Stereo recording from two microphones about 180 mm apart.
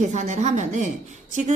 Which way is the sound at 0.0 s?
40° right (ahead or behind).